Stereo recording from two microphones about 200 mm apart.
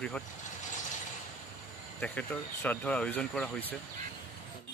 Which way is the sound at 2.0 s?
5° left (ahead or behind).